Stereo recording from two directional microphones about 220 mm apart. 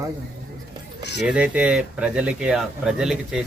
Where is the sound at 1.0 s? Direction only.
50° left (ahead or behind).